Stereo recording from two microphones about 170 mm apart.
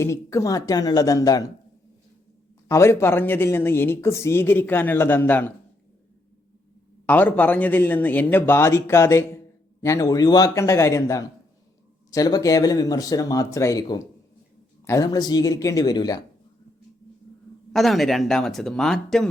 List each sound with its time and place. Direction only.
0.0 s speech: 15° left (ahead or behind)
2.6 s speech: 15° left (ahead or behind)
7.1 s speech: 10° left (ahead or behind)
17.7 s speech: centre (ahead or behind)